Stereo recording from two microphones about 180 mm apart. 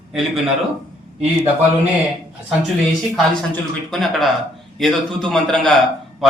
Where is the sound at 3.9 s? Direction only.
Centre (ahead or behind).